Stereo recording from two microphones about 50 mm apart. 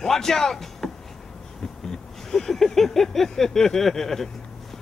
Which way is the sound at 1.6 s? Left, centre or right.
Centre.